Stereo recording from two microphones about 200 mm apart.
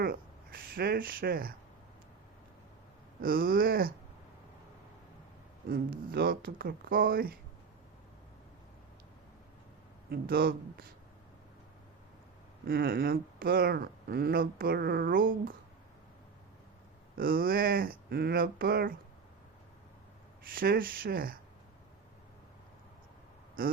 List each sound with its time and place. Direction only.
0.0 s speech: 45° right (ahead or behind)
3.2 s speech: 45° right (ahead or behind)
5.6 s speech: 45° right (ahead or behind)
10.1 s speech: 50° right (ahead or behind)
12.6 s speech: 50° right (ahead or behind)
17.2 s speech: 45° right (ahead or behind)
20.6 s speech: 45° right (ahead or behind)
23.6 s speech: 45° right (ahead or behind)